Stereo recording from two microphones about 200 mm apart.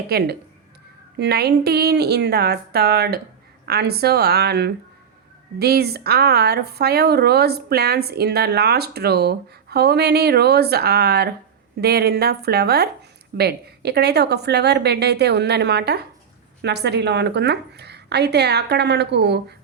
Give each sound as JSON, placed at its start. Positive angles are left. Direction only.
{"t": 0.1, "sound": "a woman's voice", "side_deg": -50}